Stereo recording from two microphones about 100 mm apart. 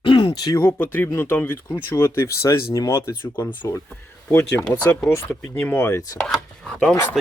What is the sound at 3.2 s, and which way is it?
Speech, 20° left (ahead or behind).